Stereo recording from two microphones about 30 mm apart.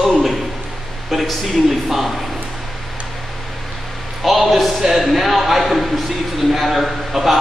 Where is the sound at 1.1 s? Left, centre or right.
Centre.